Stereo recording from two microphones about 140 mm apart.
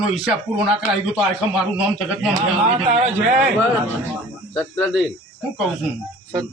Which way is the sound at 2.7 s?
55° right (ahead or behind).